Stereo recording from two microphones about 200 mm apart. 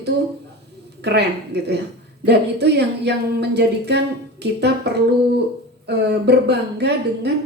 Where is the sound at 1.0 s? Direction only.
55° right (ahead or behind).